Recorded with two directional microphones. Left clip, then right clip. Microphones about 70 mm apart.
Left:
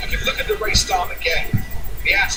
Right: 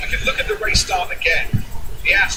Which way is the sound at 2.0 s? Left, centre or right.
Left.